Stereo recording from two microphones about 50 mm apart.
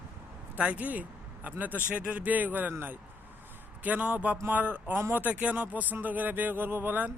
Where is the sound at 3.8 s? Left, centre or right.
Right.